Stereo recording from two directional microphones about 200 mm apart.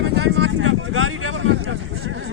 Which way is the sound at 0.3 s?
70° right (ahead or behind).